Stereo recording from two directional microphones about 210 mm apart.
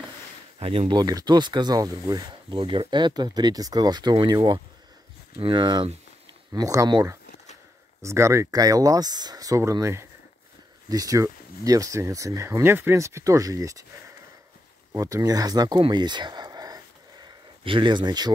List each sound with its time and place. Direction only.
0.6 s speech: 25° right (ahead or behind)